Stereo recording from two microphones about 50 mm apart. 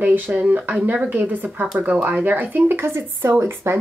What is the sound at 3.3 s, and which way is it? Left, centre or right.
Speech, right.